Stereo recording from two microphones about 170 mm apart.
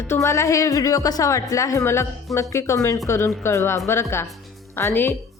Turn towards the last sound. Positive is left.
turn(degrees=15)  # may be behind; listen again after turning